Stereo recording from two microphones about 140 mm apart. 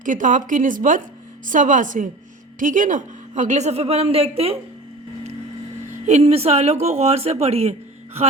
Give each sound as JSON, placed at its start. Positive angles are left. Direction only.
{"t": 0.0, "sound": "speech", "side_deg": -65}
{"t": 6.1, "sound": "speech", "side_deg": -50}